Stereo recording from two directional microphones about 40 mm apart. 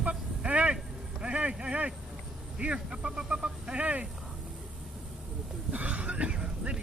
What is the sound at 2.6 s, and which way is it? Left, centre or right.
Speech, right.